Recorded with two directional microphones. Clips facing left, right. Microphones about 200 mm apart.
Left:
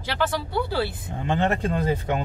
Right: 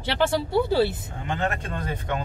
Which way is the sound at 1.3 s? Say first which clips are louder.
Left 4 dB; 30° left (ahead or behind).